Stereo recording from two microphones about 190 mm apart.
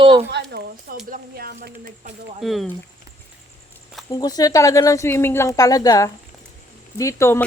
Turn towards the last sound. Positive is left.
turn(degrees=15)  # may be behind; listen again after turning